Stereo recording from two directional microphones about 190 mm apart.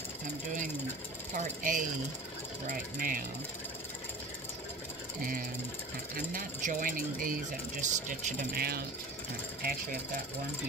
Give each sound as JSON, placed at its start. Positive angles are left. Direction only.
{"t": 1.3, "sound": "speech", "side_deg": -45}
{"t": 6.1, "sound": "speech", "side_deg": -45}
{"t": 8.5, "sound": "speech", "side_deg": -55}